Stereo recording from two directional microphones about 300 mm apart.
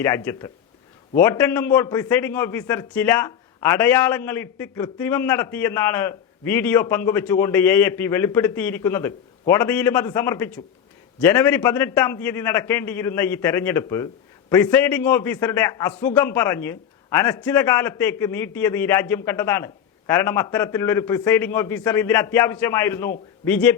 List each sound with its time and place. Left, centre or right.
0.0 s a man's voice: centre